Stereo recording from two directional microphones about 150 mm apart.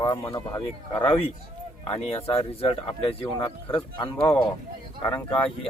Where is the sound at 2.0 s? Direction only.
40° left (ahead or behind).